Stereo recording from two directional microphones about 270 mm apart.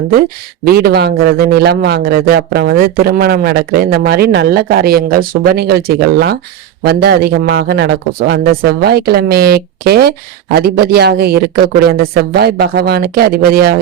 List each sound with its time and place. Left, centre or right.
0.6 s a man's voice: right